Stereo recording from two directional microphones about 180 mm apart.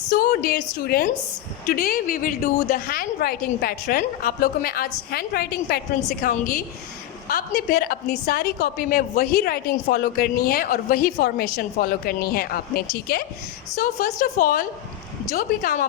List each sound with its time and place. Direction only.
0.1 s a woman's voice: 55° left (ahead or behind)